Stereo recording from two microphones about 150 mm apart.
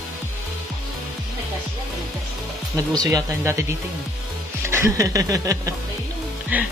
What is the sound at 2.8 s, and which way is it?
Speech, 25° right (ahead or behind).